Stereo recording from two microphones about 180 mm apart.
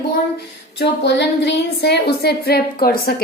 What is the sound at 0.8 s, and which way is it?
Speech, 75° left (ahead or behind).